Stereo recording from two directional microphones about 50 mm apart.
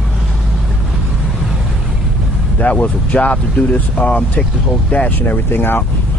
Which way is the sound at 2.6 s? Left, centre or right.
Left.